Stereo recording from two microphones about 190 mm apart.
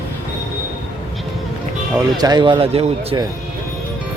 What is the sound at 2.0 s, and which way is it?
Speech, 20° right (ahead or behind).